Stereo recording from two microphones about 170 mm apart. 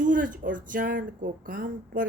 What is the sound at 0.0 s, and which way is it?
Speech, 50° right (ahead or behind).